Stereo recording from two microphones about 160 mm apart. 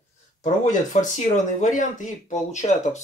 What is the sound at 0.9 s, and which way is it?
Speech, 45° left (ahead or behind).